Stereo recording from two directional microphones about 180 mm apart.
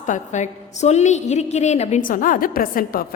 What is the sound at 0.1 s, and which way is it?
A woman's voice, 40° left (ahead or behind).